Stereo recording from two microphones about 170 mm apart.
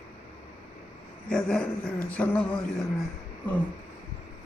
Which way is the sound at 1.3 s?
5° left (ahead or behind).